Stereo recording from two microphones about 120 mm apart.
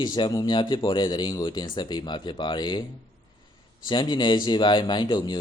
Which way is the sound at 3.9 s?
40° left (ahead or behind).